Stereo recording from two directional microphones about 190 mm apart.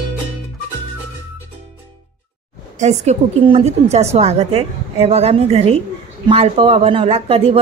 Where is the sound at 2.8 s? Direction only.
35° right (ahead or behind).